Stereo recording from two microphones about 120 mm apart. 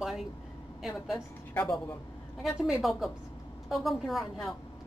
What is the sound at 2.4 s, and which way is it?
Speech, 5° right (ahead or behind).